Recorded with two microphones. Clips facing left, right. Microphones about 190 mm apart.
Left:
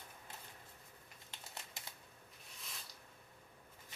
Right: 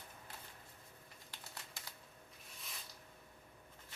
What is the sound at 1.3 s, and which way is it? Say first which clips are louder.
Typewriter: left 1 dB; 25° left (ahead or behind).